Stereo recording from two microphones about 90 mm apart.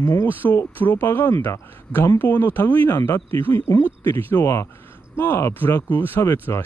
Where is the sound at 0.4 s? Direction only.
25° left (ahead or behind).